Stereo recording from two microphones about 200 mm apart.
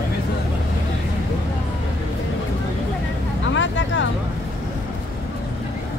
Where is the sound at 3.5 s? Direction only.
70° left (ahead or behind).